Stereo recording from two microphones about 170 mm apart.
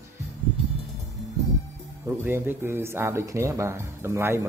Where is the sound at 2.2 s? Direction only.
15° right (ahead or behind).